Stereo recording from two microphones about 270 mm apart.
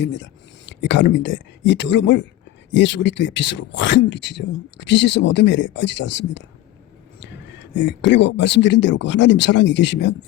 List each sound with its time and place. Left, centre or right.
0.0 s speech: left